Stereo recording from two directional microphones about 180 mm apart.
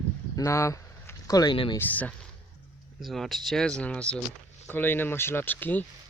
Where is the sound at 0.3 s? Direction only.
15° left (ahead or behind).